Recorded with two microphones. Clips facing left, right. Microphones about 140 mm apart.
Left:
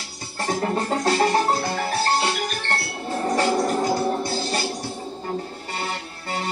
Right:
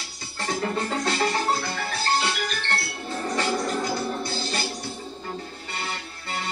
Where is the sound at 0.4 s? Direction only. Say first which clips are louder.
Left 3 dB; 40° left (ahead or behind).